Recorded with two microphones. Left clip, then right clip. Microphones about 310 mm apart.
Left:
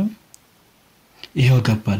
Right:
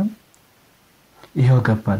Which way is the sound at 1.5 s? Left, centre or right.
Centre.